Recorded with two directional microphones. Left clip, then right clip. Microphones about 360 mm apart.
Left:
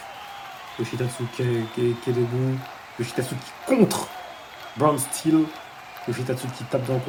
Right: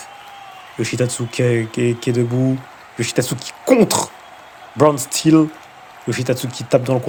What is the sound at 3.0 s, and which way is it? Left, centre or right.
Speech, right.